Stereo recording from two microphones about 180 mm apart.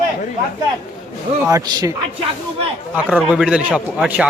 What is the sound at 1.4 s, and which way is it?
Speech, 20° right (ahead or behind).